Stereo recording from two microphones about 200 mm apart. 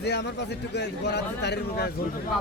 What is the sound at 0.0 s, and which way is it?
Speech, 55° left (ahead or behind).